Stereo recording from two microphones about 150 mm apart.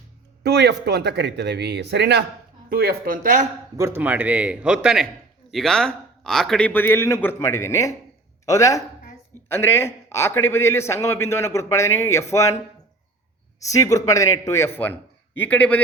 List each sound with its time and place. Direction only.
0.4 s speech: 90° right
2.6 s speech: 80° right
3.8 s a man's voice: 15° right (ahead or behind); by 12.5 s 20° left (ahead or behind)
13.6 s a man's voice: 20° left (ahead or behind)